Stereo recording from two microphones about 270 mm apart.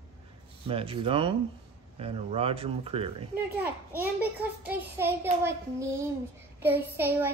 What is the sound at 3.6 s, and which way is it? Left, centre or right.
Child singing, centre.